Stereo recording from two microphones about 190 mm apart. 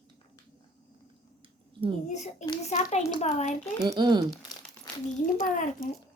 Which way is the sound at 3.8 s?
25° right (ahead or behind).